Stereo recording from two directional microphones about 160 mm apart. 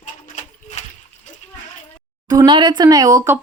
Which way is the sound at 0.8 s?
45° left (ahead or behind).